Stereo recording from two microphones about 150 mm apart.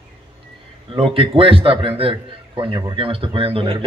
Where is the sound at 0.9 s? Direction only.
40° right (ahead or behind).